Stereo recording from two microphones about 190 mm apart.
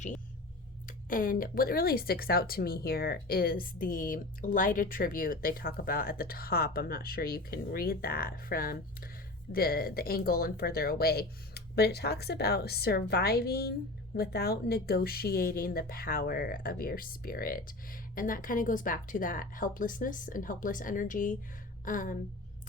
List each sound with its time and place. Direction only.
0.9 s speech: 45° left (ahead or behind)